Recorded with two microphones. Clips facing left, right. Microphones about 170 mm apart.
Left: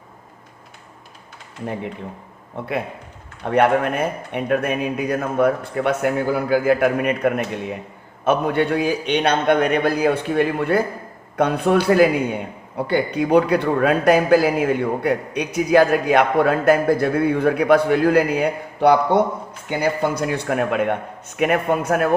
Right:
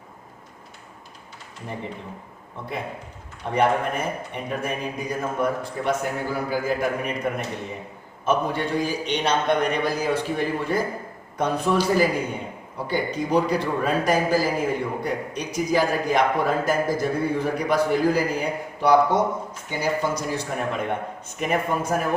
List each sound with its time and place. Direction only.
3.4 s a man's voice: 65° left (ahead or behind)